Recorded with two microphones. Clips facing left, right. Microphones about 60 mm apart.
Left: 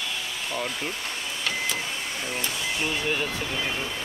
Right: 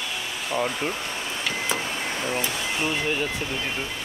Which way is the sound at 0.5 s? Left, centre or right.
Right.